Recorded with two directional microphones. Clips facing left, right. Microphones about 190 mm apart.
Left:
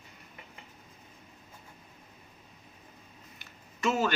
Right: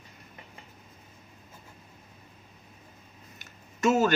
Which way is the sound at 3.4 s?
45° right (ahead or behind).